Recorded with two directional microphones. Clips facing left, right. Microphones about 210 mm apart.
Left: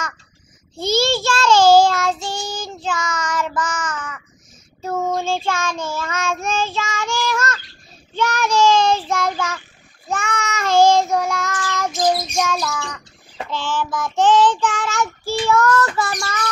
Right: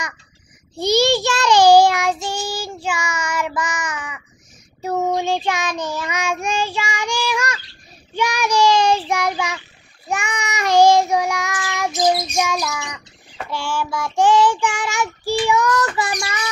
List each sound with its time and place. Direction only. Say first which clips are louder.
0.7 s child singing: right 3 dB; 15° right (ahead or behind)